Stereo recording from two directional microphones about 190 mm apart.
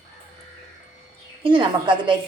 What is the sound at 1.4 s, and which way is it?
Speech, 25° right (ahead or behind).